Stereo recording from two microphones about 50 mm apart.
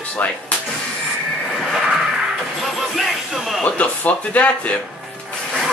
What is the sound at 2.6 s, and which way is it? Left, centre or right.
Music, centre.